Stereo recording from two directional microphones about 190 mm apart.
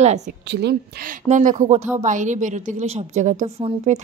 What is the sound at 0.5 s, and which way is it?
Speech, 60° right (ahead or behind).